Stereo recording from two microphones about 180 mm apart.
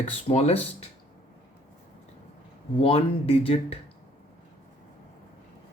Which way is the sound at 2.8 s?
30° left (ahead or behind).